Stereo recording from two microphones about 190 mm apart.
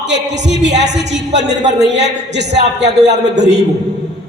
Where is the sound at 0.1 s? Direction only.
70° right (ahead or behind).